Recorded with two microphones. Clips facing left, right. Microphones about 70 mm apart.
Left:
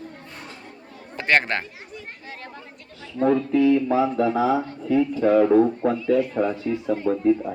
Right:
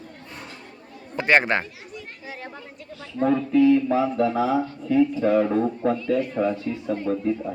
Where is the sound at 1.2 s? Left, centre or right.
Centre.